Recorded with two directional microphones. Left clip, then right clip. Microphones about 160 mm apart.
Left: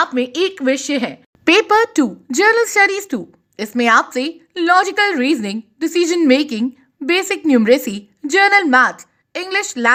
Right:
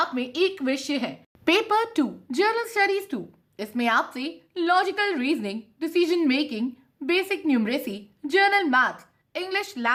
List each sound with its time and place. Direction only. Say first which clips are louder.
0.0 s a woman's voice: left 7 dB; 35° left (ahead or behind)